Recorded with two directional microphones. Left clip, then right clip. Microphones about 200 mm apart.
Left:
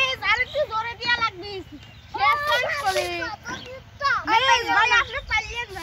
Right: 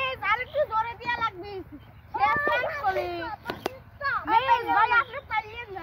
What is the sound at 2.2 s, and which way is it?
Children playing, 20° left (ahead or behind).